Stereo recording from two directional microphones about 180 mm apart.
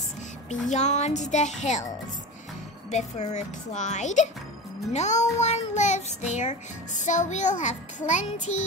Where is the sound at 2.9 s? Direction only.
40° left (ahead or behind).